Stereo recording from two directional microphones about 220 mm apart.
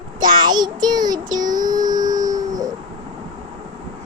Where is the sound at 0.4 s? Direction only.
20° right (ahead or behind).